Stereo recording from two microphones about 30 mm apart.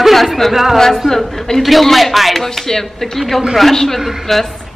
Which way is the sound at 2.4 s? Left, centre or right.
Centre.